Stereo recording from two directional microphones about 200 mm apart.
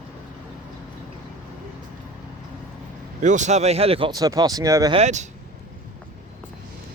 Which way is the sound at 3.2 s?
40° right (ahead or behind).